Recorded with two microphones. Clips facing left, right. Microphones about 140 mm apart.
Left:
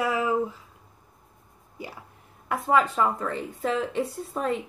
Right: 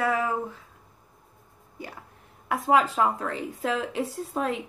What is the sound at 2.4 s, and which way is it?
A woman's voice, centre (ahead or behind).